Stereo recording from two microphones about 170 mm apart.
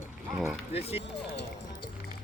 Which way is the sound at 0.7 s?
35° left (ahead or behind).